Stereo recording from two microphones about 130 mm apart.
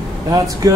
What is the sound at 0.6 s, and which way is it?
Speech, 30° right (ahead or behind).